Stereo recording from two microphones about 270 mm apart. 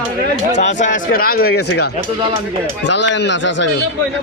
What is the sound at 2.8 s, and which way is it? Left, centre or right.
Speech, left.